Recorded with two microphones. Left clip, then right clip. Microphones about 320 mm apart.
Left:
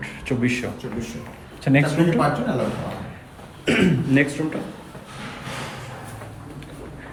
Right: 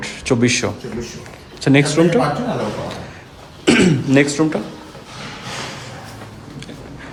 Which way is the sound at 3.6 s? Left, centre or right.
Centre.